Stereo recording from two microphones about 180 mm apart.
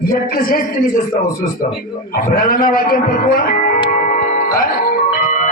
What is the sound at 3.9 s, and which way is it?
Music, 45° left (ahead or behind).